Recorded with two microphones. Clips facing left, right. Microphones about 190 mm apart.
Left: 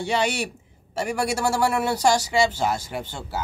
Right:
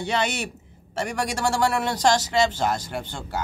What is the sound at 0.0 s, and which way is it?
A man's voice, 10° left (ahead or behind).